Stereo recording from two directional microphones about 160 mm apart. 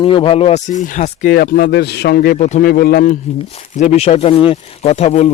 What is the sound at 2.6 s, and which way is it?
Speech, 70° left (ahead or behind).